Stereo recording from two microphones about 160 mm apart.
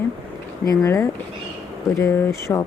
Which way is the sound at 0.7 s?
20° left (ahead or behind).